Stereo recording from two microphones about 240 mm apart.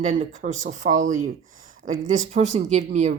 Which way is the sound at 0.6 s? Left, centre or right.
Right.